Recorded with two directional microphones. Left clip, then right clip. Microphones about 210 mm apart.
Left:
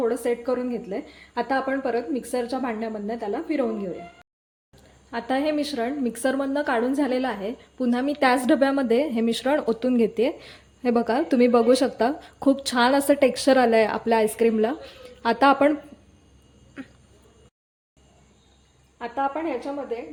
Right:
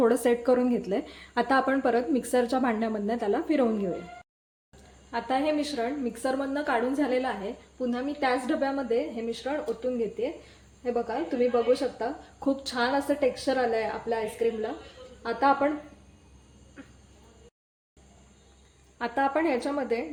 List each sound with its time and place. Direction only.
0.0 s a woman's voice: 15° right (ahead or behind)
5.1 s a woman's voice: 25° left (ahead or behind); by 15.7 s 40° left (ahead or behind)
18.9 s a woman's voice: 15° right (ahead or behind)